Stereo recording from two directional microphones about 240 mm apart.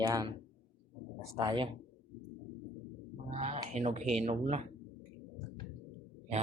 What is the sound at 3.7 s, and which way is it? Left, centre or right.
Speech, right.